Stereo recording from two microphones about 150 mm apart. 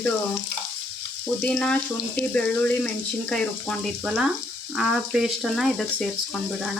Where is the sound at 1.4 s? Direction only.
5° left (ahead or behind).